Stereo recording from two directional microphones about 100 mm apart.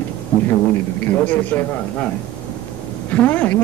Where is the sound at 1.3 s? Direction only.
15° left (ahead or behind).